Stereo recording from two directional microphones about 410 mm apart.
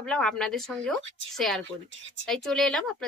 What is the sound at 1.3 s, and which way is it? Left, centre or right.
A woman's voice, centre.